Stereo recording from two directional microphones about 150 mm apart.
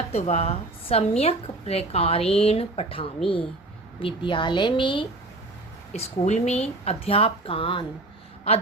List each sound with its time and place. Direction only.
0.1 s a woman's voice: 45° left (ahead or behind)
5.9 s speech: 50° left (ahead or behind)